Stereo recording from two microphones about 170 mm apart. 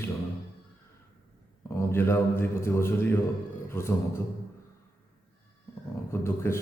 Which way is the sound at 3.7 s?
15° left (ahead or behind).